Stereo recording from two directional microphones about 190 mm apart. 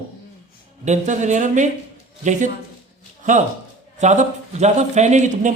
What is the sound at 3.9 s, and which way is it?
A man's voice, 40° right (ahead or behind).